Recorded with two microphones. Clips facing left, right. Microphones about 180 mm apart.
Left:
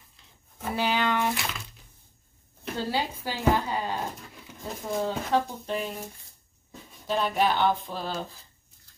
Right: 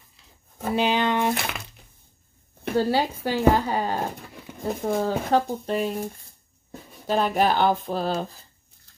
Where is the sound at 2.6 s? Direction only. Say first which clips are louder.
Right 7 dB; 55° right (ahead or behind).